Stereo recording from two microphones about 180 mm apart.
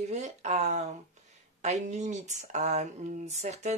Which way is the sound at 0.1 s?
40° right (ahead or behind).